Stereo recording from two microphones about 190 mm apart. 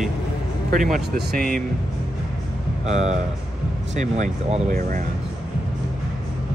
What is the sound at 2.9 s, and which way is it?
Speech, 35° right (ahead or behind).